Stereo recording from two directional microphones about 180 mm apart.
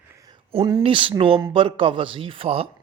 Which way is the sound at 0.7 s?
30° right (ahead or behind).